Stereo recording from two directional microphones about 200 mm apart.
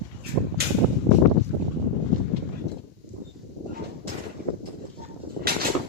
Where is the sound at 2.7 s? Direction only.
55° right (ahead or behind).